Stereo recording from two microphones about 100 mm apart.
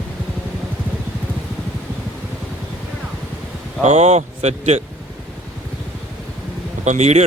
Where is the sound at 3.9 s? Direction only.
90° right.